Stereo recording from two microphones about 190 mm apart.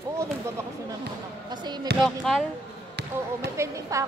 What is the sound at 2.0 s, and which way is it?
Speech, centre (ahead or behind).